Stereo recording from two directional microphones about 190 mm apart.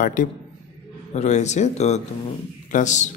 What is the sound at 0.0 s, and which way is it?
Speech, 45° left (ahead or behind).